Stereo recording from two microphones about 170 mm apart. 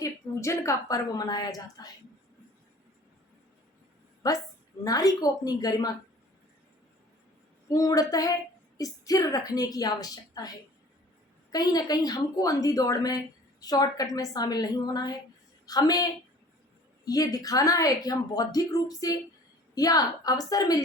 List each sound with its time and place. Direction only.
0.0 s a woman's voice: 15° left (ahead or behind)
4.2 s a woman's voice: 20° left (ahead or behind)
7.7 s a woman's voice: 20° left (ahead or behind)
11.5 s a woman's voice: 20° left (ahead or behind)
17.1 s a woman's voice: 20° left (ahead or behind)